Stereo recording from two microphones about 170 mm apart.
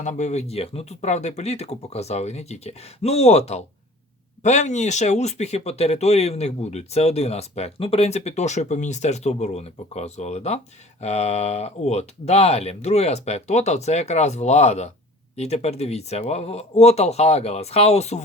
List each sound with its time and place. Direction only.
0.0 s speech: 45° left (ahead or behind)